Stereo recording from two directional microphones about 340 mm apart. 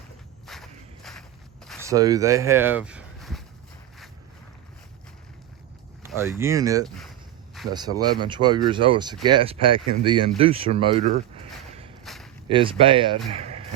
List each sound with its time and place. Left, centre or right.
0.4 s walk: centre
1.9 s speech: centre
6.0 s speech: centre
6.8 s speech: centre
7.7 s speech: centre
12.0 s a sound: centre
12.5 s speech: centre
13.3 s vehicle: centre